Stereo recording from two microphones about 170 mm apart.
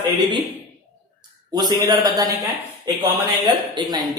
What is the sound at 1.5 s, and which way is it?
Speech, 25° right (ahead or behind).